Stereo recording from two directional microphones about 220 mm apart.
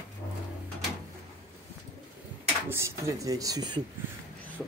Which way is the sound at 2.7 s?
15° right (ahead or behind).